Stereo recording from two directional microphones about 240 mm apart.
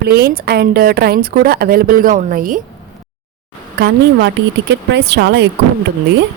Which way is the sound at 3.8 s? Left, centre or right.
Right.